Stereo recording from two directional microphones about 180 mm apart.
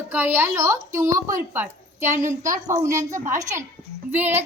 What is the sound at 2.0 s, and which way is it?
Speech, 40° right (ahead or behind).